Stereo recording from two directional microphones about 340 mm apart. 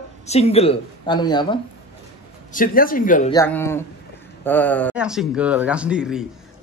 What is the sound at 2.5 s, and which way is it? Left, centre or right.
Speech, left.